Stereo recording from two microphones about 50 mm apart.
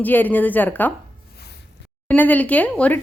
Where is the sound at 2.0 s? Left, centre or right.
Left.